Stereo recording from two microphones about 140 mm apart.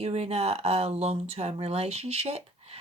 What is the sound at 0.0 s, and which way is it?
Speech, 50° right (ahead or behind).